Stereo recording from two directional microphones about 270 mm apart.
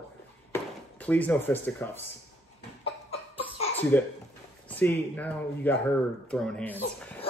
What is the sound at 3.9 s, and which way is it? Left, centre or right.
Speech, centre.